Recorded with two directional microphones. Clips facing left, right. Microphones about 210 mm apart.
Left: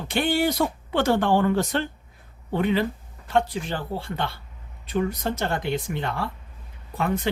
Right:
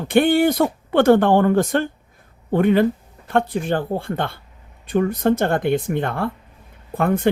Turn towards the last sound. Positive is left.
turn(degrees=-55)  # may be behind; listen again after turning